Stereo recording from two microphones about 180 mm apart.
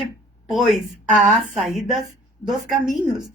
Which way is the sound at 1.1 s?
40° right (ahead or behind).